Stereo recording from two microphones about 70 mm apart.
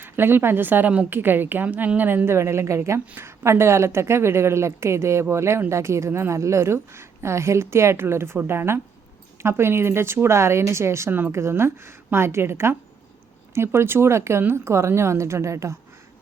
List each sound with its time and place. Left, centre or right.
0.0 s a woman's voice: right
3.1 s speech: right